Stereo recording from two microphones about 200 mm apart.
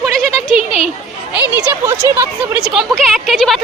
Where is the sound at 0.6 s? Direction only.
30° left (ahead or behind).